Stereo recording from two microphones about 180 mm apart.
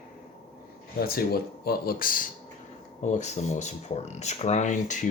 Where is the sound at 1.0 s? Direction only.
55° left (ahead or behind).